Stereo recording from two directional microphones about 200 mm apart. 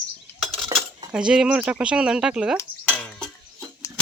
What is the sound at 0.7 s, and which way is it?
Cutlery, 20° right (ahead or behind).